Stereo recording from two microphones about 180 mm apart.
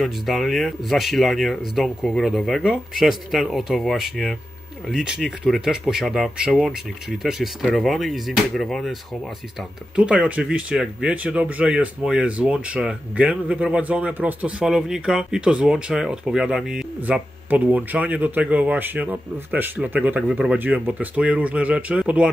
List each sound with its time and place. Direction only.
0.0 s speech: centre (ahead or behind)
9.9 s speech: 5° right (ahead or behind)